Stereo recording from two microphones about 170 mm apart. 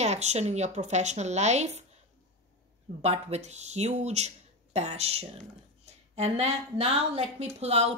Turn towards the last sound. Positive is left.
turn(degrees=-40)  # may be behind; listen again after turning